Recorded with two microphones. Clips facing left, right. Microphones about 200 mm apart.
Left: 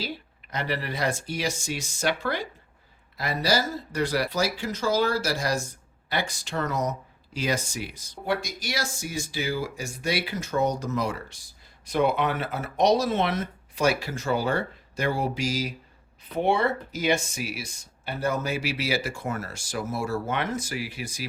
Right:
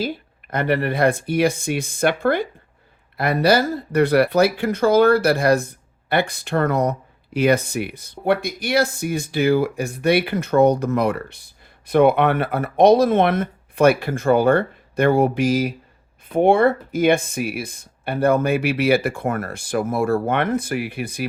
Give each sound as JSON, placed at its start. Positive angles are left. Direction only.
{"t": 0.0, "sound": "speech", "side_deg": -50}